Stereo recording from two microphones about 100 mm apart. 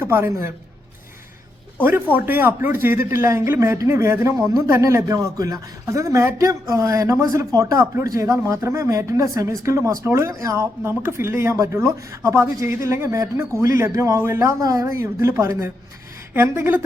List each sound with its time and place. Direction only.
0.0 s speech: 25° right (ahead or behind)
2.1 s a man's voice: 20° right (ahead or behind)
14.4 s speech: 35° right (ahead or behind)